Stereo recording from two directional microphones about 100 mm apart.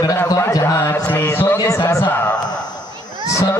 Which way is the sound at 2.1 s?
20° left (ahead or behind).